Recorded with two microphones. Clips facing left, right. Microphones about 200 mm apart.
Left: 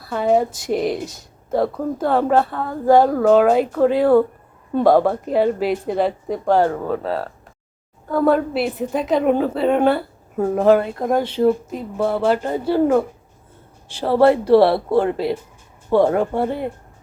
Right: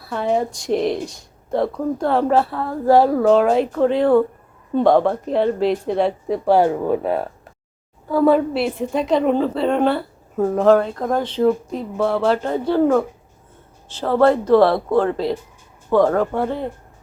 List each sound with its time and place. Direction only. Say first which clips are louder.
0.0 s a woman's voice: left 3 dB; centre (ahead or behind); by 7.3 s 15° right (ahead or behind)
8.1 s a woman's voice: right 2 dB; centre (ahead or behind)
15.9 s speech: even; 25° left (ahead or behind)